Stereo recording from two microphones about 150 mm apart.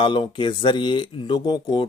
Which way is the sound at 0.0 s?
30° left (ahead or behind).